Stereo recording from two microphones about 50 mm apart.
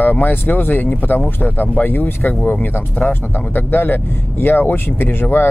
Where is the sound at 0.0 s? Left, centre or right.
Left.